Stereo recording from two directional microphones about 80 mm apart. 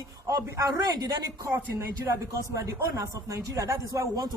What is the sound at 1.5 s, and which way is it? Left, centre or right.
Speech, right.